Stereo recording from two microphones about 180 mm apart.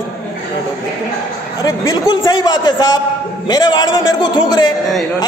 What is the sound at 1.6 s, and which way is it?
A man's voice, 20° left (ahead or behind).